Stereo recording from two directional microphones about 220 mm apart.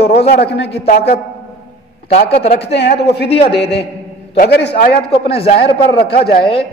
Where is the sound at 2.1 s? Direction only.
30° left (ahead or behind).